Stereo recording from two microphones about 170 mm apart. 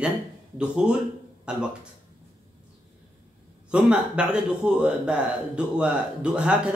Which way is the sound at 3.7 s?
5° right (ahead or behind).